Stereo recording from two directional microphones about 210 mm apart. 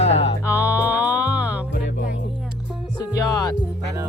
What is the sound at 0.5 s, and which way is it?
Music, 10° right (ahead or behind).